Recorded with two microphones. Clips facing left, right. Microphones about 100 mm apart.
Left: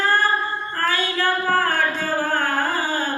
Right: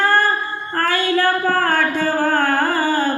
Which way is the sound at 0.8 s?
50° right (ahead or behind).